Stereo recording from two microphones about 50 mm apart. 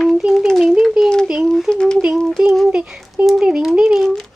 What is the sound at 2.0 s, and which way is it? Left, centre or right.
Child singing, centre.